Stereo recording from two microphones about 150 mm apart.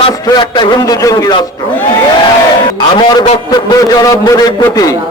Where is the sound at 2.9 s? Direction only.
30° left (ahead or behind).